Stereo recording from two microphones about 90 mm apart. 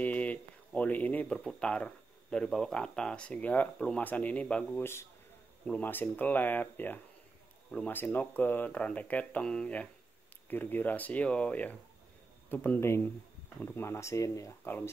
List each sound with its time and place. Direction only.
0.0 s a sound: 15° left (ahead or behind)
1.6 s speech: 10° left (ahead or behind)
12.8 s speech: 30° left (ahead or behind)
14.6 s speech: 25° left (ahead or behind)